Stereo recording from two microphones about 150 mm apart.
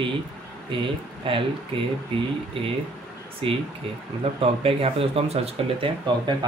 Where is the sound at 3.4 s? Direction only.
35° right (ahead or behind).